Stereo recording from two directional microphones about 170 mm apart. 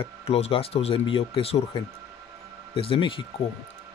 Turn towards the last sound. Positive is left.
turn(degrees=30)  # may be behind; listen again after turning